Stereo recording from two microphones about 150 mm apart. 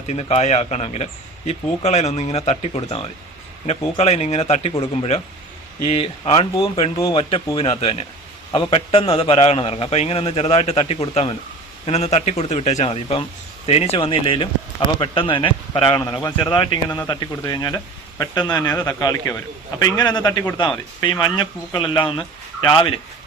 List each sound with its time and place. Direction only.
0.1 s a man's voice: 45° left (ahead or behind)
6.9 s speech: 25° left (ahead or behind)
7.2 s a man's voice: 40° left (ahead or behind)
22.0 s speech: 5° left (ahead or behind)
22.7 s a man's voice: 35° left (ahead or behind)